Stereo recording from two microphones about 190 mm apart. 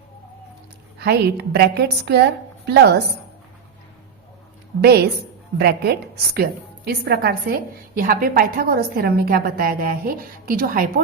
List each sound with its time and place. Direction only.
0.9 s a woman's voice: 60° right (ahead or behind)
4.8 s a woman's voice: 60° right (ahead or behind)